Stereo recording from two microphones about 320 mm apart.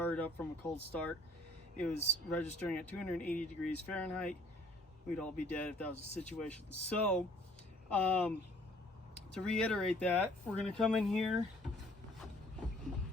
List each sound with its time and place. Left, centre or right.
0.0 s speech: centre
2.3 s speech: centre
9.3 s speech: centre